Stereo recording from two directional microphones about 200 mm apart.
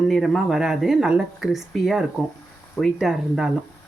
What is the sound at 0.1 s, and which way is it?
Speech, centre (ahead or behind).